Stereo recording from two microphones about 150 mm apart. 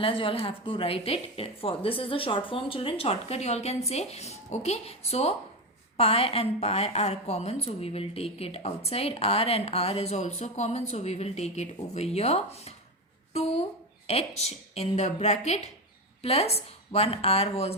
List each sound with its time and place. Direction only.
0.0 s a woman's voice: 35° left (ahead or behind)